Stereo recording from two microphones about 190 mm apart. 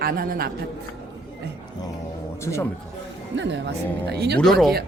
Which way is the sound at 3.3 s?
70° right (ahead or behind).